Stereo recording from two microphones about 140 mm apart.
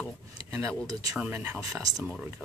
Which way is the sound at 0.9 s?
25° right (ahead or behind).